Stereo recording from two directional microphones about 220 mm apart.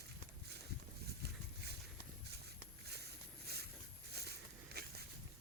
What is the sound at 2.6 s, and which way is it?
Boat, 50° right (ahead or behind).